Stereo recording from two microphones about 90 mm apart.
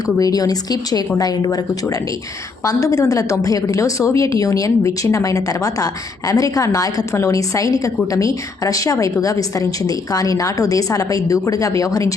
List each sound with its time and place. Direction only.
0.2 s a woman's voice: 45° left (ahead or behind)